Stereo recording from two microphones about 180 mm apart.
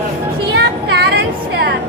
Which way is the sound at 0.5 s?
65° right (ahead or behind).